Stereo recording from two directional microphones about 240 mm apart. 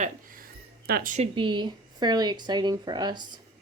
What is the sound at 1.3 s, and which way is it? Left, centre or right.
Speech, centre.